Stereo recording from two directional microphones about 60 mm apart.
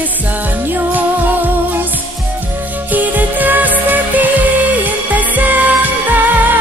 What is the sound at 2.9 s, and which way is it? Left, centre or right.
Music, right.